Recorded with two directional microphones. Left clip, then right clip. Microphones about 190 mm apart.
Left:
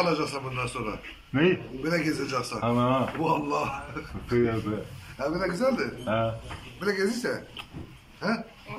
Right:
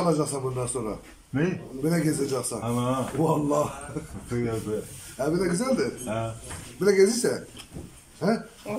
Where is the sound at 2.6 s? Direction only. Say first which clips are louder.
Left 7 dB; 10° right (ahead or behind).